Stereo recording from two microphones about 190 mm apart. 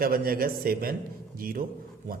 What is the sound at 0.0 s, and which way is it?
A man's voice, 50° right (ahead or behind).